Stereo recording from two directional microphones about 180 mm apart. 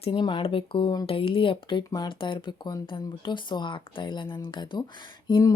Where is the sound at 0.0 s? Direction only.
25° left (ahead or behind).